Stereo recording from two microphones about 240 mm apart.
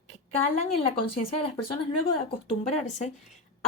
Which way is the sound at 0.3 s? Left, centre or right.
Left.